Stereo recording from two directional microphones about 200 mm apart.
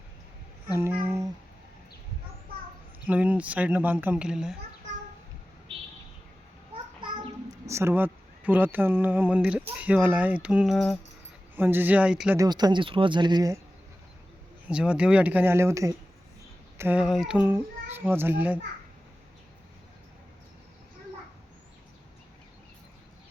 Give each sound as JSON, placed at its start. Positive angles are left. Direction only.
{"t": 0.7, "sound": "a sound", "side_deg": -10}
{"t": 3.1, "sound": "speech", "side_deg": -5}
{"t": 7.7, "sound": "speech", "side_deg": -10}
{"t": 12.4, "sound": "speech", "side_deg": -20}
{"t": 14.7, "sound": "speech", "side_deg": -5}